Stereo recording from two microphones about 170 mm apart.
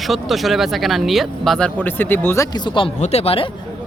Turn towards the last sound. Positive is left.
turn(degrees=35)  # may be behind; listen again after turning